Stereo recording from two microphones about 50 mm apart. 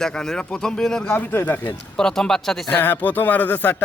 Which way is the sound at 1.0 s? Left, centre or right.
Left.